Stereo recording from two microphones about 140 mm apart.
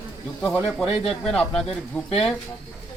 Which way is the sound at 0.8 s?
45° left (ahead or behind).